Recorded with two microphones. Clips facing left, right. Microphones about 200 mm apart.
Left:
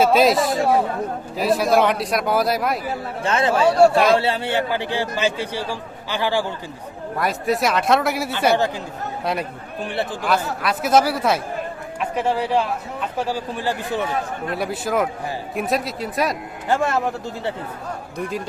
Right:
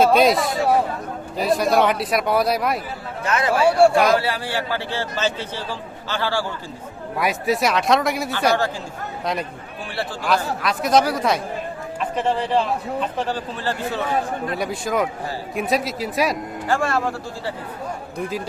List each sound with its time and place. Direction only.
0.0 s a man's voice: centre (ahead or behind)
3.2 s speech: 25° left (ahead or behind)
3.6 s a man's voice: 10° right (ahead or behind)
4.1 s a man's voice: 25° left (ahead or behind)
7.2 s a man's voice: centre (ahead or behind); by 14.0 s 15° left (ahead or behind)
14.5 s a man's voice: centre (ahead or behind)
16.6 s speech: 20° left (ahead or behind)
18.2 s a man's voice: centre (ahead or behind)